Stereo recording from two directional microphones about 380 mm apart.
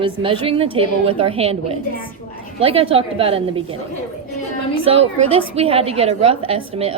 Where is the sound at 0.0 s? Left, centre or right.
Centre.